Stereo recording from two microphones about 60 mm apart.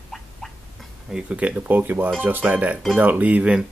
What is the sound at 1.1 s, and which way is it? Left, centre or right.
Speech, right.